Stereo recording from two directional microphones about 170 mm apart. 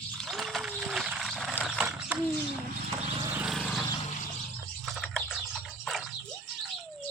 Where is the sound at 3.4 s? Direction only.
Centre (ahead or behind).